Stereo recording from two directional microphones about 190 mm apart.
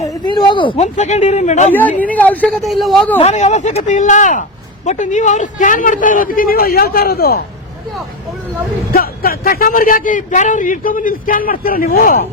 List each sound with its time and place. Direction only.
0.3 s speech: 25° left (ahead or behind)
1.7 s speech: 10° left (ahead or behind)
3.2 s speech: 35° left (ahead or behind); by 7.4 s 55° left (ahead or behind)
8.9 s speech: 50° left (ahead or behind)